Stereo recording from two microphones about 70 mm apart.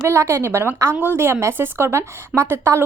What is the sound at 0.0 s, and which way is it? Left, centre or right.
A woman's voice, right.